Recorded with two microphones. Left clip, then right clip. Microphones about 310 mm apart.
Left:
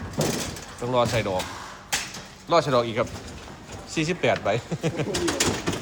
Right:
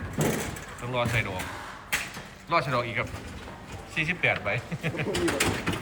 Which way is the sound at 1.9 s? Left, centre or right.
Left.